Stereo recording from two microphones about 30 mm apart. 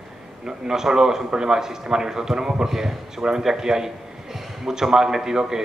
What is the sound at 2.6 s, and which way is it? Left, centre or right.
A man's voice, centre.